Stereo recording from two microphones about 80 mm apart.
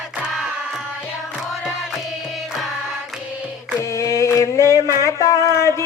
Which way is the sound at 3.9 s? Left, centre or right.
Left.